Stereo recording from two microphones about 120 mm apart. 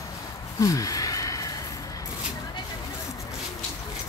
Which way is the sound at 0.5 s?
30° left (ahead or behind).